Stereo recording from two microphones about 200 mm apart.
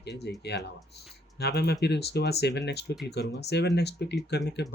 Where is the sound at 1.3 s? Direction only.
55° left (ahead or behind).